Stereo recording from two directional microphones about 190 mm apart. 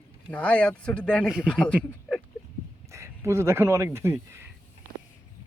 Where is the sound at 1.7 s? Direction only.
5° right (ahead or behind).